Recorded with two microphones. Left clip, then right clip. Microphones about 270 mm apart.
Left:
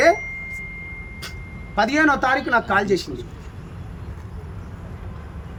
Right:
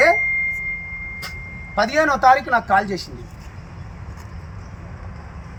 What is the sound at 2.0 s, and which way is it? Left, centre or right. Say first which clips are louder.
Speech: right 4 dB; centre.